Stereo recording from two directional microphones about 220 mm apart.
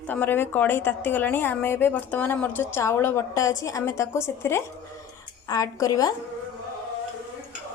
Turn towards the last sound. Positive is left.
turn(degrees=15)  # may be behind; listen again after turning